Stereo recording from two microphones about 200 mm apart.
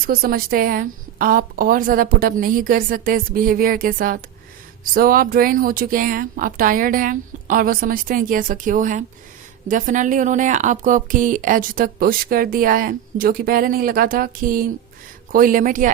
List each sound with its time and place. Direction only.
0.0 s a woman's voice: 45° right (ahead or behind)